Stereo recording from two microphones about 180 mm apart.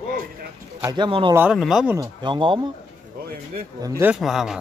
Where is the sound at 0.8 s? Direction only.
25° right (ahead or behind).